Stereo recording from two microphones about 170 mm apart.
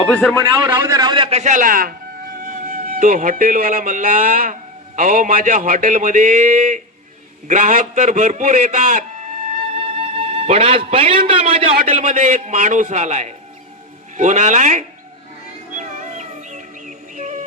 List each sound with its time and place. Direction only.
0.3 s a man's voice: 25° right (ahead or behind); by 9.6 s 50° right (ahead or behind)
9.7 s a man's voice: 35° right (ahead or behind)
15.7 s music: 45° right (ahead or behind)